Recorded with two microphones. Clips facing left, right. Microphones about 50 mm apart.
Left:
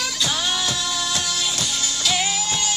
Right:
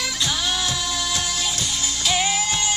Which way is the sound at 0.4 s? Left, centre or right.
Left.